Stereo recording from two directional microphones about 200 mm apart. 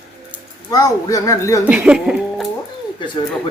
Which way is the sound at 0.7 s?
20° left (ahead or behind).